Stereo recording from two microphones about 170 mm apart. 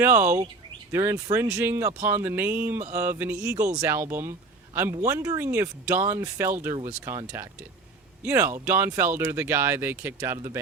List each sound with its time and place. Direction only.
0.0 s speech: 15° right (ahead or behind)